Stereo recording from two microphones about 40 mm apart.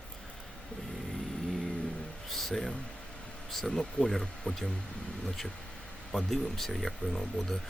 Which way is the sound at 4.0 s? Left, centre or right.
Left.